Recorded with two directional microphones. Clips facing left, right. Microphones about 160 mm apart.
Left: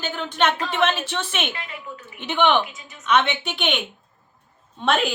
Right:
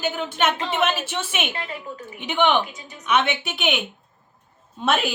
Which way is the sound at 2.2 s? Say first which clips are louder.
Left 1 dB; 10° right (ahead or behind).